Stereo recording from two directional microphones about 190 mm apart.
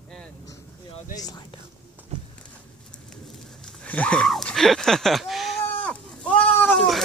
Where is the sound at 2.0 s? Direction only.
10° right (ahead or behind).